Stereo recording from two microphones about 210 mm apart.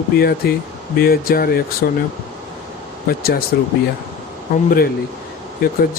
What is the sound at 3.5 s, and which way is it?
Speech, 50° left (ahead or behind).